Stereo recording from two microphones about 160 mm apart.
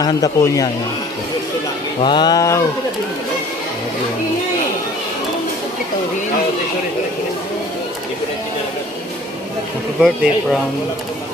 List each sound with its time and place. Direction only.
0.0 s a man's voice: 25° left (ahead or behind)
2.0 s a man's voice: 30° left (ahead or behind)
10.0 s speech: centre (ahead or behind)